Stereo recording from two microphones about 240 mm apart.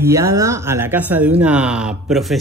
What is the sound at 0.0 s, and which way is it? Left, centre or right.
Speech, centre.